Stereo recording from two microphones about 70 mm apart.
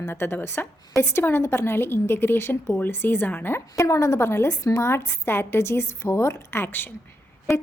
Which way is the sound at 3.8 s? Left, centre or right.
Left.